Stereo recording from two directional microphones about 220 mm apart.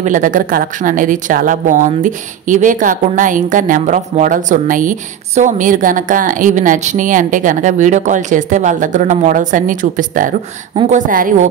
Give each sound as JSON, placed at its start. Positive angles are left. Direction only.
{"t": 0.0, "sound": "speech", "side_deg": -35}